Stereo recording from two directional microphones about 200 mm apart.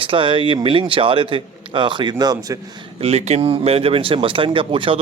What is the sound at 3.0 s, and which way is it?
Speech, 30° right (ahead or behind).